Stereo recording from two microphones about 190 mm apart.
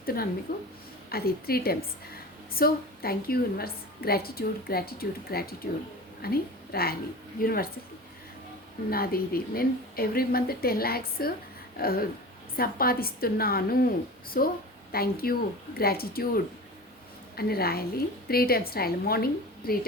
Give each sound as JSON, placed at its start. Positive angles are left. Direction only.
{"t": 0.0, "sound": "a sound", "side_deg": 50}
{"t": 0.5, "sound": "a woman's voice", "side_deg": 50}
{"t": 8.9, "sound": "a woman's voice", "side_deg": 50}